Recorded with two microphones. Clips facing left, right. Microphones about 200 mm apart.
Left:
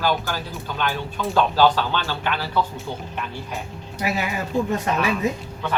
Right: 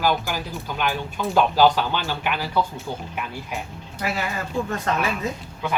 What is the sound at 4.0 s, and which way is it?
Speech, 15° left (ahead or behind).